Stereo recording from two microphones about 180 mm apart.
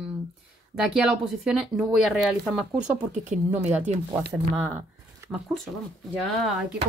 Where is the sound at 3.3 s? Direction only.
40° right (ahead or behind).